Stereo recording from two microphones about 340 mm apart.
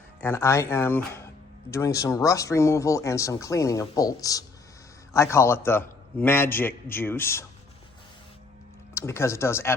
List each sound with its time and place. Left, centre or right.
0.2 s speech: centre
9.0 s speech: centre